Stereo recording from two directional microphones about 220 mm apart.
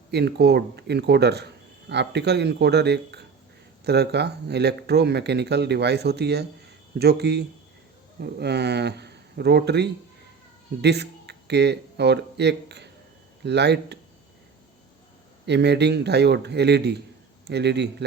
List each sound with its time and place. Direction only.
0.1 s speech: 50° right (ahead or behind)
15.4 s a man's voice: 50° right (ahead or behind)